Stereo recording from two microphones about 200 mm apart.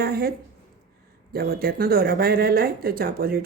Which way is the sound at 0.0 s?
50° right (ahead or behind).